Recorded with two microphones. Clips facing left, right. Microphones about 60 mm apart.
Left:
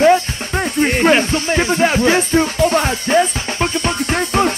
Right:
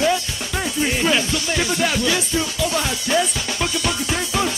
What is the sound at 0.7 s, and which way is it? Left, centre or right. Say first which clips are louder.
Music: left 7 dB; left.